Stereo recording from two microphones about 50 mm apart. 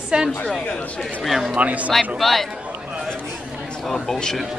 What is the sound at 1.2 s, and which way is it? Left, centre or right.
Speech, centre.